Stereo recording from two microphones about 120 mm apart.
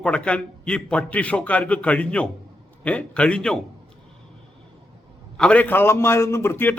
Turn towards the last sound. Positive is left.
turn(degrees=15)  # may be behind; listen again after turning